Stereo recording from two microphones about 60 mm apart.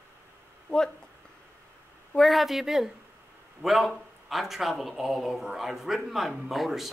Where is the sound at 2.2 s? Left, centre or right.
Centre.